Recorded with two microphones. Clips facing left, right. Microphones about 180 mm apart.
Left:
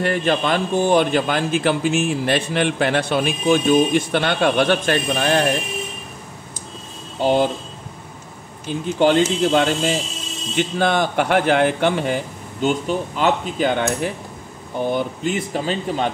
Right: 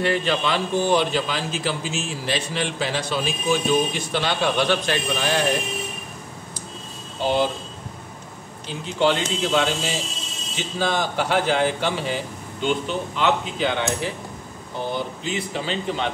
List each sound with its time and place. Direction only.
0.0 s a man's voice: 50° left (ahead or behind)
8.6 s a man's voice: 50° left (ahead or behind)
12.6 s speech: 45° left (ahead or behind)